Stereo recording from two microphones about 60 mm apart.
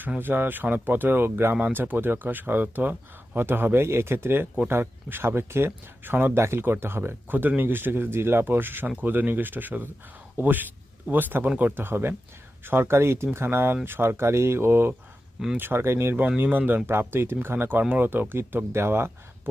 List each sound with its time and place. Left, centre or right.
0.2 s speech: right
11.4 s speech: right
11.8 s speech: right
16.4 s speech: right